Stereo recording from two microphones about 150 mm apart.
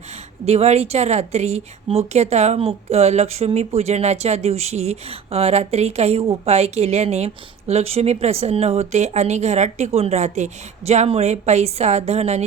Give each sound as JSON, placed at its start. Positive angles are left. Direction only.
{"t": 0.4, "sound": "a woman's voice", "side_deg": -45}